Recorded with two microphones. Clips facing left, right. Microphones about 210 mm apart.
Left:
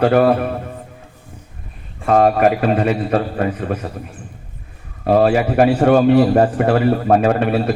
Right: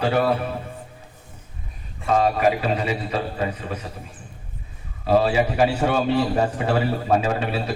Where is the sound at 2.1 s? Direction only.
55° left (ahead or behind).